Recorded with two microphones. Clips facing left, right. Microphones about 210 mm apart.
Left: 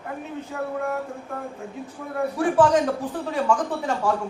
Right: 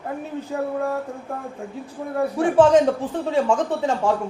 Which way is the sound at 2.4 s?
25° right (ahead or behind).